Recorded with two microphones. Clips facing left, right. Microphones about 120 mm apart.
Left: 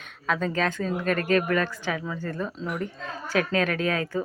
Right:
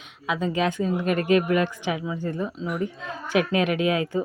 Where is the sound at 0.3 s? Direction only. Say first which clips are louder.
Right 2 dB; 10° right (ahead or behind).